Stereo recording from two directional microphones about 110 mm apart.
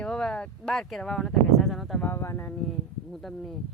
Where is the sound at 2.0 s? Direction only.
20° left (ahead or behind).